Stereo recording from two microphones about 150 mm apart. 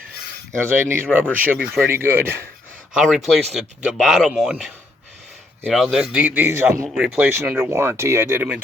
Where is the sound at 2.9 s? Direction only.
Centre (ahead or behind); by 6.8 s 20° right (ahead or behind).